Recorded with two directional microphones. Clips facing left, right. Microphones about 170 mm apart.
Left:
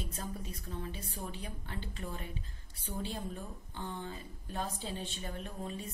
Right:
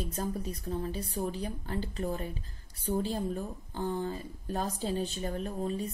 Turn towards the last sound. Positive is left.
turn(degrees=-40)  # may be behind; listen again after turning